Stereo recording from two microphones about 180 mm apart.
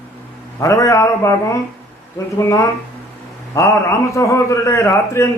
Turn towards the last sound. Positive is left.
turn(degrees=15)  # may be behind; listen again after turning